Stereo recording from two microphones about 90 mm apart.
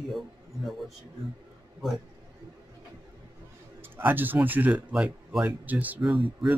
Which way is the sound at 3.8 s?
25° right (ahead or behind).